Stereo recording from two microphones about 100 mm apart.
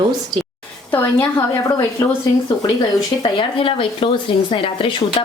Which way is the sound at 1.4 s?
35° left (ahead or behind).